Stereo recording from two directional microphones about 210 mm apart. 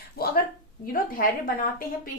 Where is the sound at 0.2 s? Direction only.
45° left (ahead or behind).